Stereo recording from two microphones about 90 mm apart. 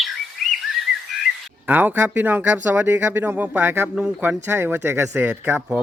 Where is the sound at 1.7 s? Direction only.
20° right (ahead or behind).